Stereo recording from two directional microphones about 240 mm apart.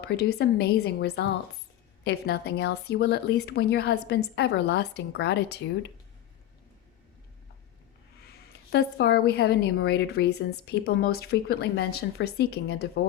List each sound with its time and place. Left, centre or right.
0.2 s speech: left
8.7 s speech: left